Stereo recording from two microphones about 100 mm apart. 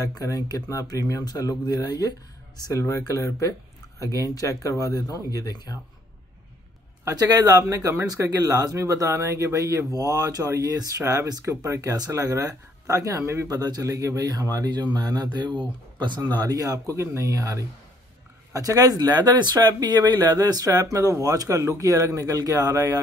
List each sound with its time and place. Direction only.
0.0 s speech: 35° left (ahead or behind)
7.1 s speech: 35° right (ahead or behind)